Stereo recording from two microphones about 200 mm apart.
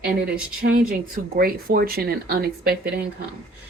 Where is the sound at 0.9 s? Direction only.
45° right (ahead or behind).